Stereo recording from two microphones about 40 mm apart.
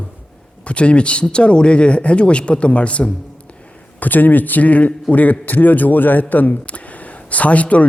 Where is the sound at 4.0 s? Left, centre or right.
Left.